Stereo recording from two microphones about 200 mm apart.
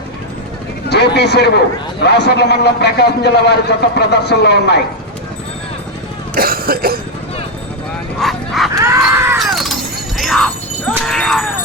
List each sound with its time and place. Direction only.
0.9 s a man's voice: 55° left (ahead or behind)
6.3 s cough: 45° right (ahead or behind)
8.2 s bow-wow: centre (ahead or behind)
8.8 s screaming: 15° right (ahead or behind)
9.4 s shatter: centre (ahead or behind)
10.2 s jingle bell: centre (ahead or behind)
11.0 s a sound: 5° left (ahead or behind)